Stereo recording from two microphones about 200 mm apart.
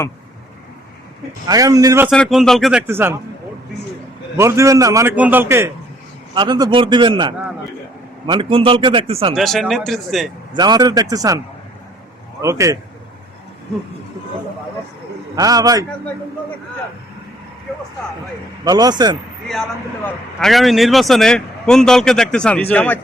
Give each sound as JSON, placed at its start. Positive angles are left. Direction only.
{"t": 1.5, "sound": "a man's voice", "side_deg": -15}
{"t": 2.0, "sound": "speech", "side_deg": 0}
{"t": 4.4, "sound": "a man's voice", "side_deg": -15}
{"t": 9.3, "sound": "speech", "side_deg": 0}
{"t": 10.5, "sound": "speech", "side_deg": -20}
{"t": 12.4, "sound": "a man's voice", "side_deg": -15}
{"t": 15.4, "sound": "a man's voice", "side_deg": -20}
{"t": 18.6, "sound": "speech", "side_deg": -20}
{"t": 20.1, "sound": "speech", "side_deg": 0}